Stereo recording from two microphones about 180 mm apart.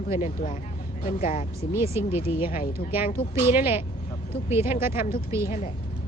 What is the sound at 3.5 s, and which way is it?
Speech, 10° right (ahead or behind).